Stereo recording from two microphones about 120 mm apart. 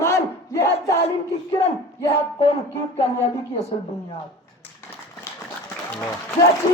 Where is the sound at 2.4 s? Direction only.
55° left (ahead or behind).